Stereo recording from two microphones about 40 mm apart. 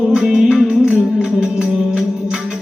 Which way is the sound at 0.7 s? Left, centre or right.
Right.